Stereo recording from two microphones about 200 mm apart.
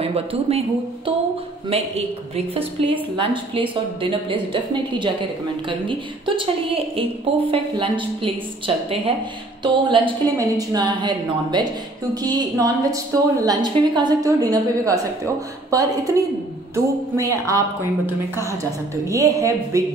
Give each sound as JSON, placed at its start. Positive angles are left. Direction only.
{"t": 0.0, "sound": "a woman's voice", "side_deg": -30}